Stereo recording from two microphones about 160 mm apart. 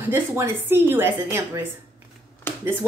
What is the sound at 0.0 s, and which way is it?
A woman's voice, 15° right (ahead or behind).